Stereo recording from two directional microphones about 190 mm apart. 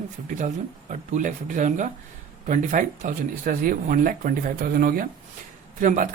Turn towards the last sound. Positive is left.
turn(degrees=-45)  # may be behind; listen again after turning